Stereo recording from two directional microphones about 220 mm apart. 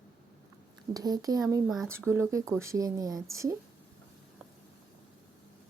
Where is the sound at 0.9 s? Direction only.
15° right (ahead or behind).